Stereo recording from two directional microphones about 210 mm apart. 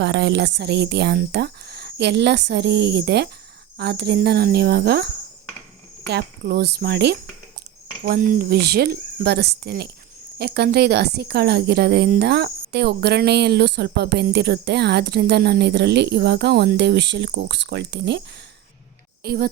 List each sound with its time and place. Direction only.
0.0 s a woman's voice: 55° right (ahead or behind)
19.2 s a woman's voice: 45° right (ahead or behind)